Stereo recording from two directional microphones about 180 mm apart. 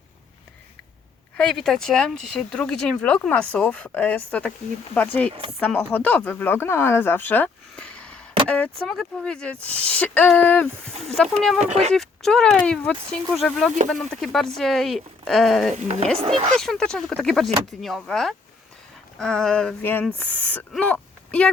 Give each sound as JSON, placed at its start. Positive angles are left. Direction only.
{"t": 1.4, "sound": "speech", "side_deg": 0}
{"t": 11.6, "sound": "speech", "side_deg": -35}
{"t": 11.9, "sound": "speech", "side_deg": 5}
{"t": 16.1, "sound": "speech", "side_deg": -35}
{"t": 16.6, "sound": "speech", "side_deg": 0}